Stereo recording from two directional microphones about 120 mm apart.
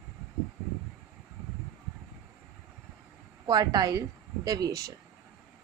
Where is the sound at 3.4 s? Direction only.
35° right (ahead or behind).